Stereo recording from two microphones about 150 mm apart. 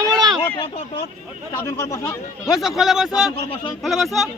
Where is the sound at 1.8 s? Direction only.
20° left (ahead or behind).